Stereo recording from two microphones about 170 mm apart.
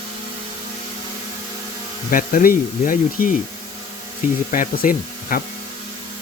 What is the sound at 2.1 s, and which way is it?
Speech, 55° left (ahead or behind).